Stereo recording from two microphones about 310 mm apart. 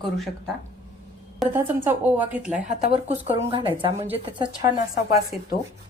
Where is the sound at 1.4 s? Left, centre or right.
Centre.